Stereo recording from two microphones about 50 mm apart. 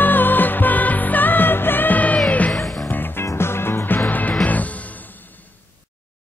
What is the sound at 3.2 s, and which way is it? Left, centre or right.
Music, left.